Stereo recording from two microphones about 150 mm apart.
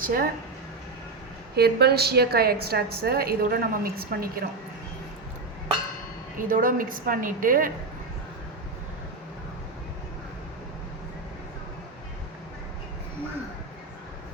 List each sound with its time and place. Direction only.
0.0 s speech: 70° right (ahead or behind)
1.5 s a woman's voice: 90° right
6.5 s a woman's voice: 65° right (ahead or behind)